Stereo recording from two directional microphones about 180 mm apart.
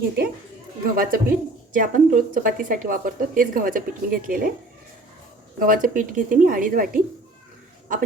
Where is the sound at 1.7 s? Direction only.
50° right (ahead or behind).